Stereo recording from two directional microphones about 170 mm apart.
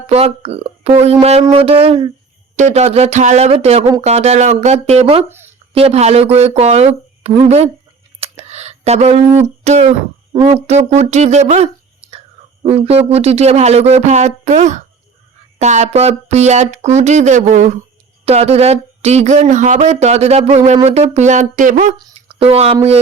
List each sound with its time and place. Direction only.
0.1 s speech: 35° right (ahead or behind)
8.2 s a sound: 40° right (ahead or behind)
9.7 s speech: 40° right (ahead or behind)
21.9 s speech: 30° right (ahead or behind)